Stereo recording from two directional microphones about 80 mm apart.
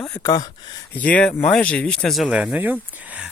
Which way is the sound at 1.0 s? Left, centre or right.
Centre.